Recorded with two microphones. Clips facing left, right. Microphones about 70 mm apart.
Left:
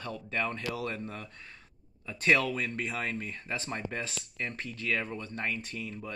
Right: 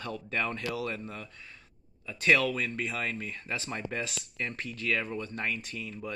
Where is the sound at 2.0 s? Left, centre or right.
Left.